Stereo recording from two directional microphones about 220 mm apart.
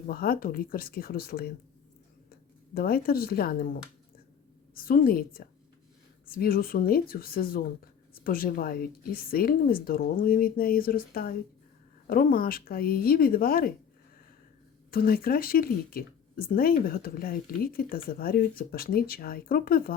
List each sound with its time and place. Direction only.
0.1 s speech: 40° left (ahead or behind)
2.7 s speech: 45° left (ahead or behind)
4.7 s speech: 40° left (ahead or behind)
14.8 s speech: 40° left (ahead or behind)